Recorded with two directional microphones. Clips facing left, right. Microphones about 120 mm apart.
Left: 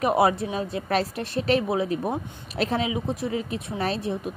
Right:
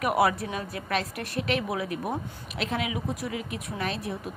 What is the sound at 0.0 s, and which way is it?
A woman's voice, 25° left (ahead or behind).